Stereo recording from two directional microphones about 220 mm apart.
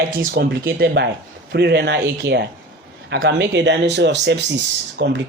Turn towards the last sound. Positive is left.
turn(degrees=-50)  # may be behind; listen again after turning